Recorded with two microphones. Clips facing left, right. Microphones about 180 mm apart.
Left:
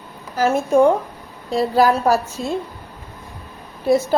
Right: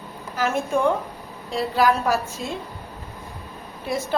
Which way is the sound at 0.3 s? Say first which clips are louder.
Left 7 dB; 40° left (ahead or behind).